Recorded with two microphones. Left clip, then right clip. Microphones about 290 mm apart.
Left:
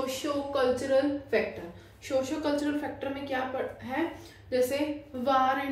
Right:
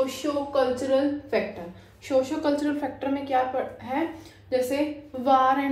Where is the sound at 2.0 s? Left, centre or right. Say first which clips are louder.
Right 5 dB; centre.